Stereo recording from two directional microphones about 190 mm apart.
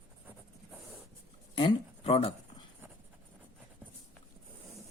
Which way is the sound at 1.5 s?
30° left (ahead or behind).